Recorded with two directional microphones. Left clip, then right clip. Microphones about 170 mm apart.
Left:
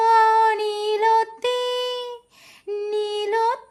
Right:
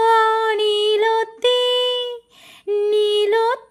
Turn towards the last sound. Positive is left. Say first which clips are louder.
# right 5 dB
turn(degrees=-30)  # may be behind; listen again after turning